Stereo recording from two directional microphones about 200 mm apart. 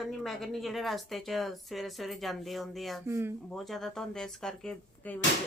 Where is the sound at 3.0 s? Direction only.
15° right (ahead or behind).